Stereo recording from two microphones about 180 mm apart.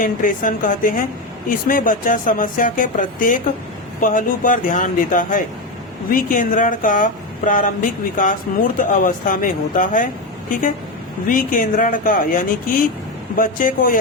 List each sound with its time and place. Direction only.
0.0 s speech: 50° left (ahead or behind)
11.3 s speech: 50° left (ahead or behind)